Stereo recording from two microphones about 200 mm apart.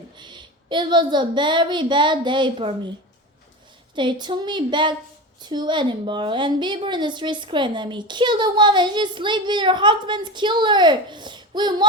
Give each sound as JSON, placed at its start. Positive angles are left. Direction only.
{"t": 0.2, "sound": "a woman's voice", "side_deg": -20}
{"t": 3.9, "sound": "a woman's voice", "side_deg": -25}